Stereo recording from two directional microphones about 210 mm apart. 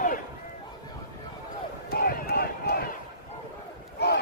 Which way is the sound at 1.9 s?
50° left (ahead or behind).